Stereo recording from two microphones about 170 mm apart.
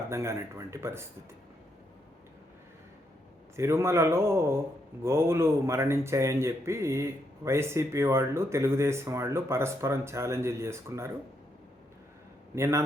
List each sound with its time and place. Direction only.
0.1 s speech: 15° right (ahead or behind)
3.5 s speech: 15° right (ahead or behind)
12.5 s speech: 15° right (ahead or behind)